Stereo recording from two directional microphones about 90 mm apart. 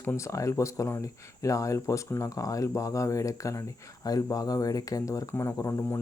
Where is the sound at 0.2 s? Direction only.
35° left (ahead or behind).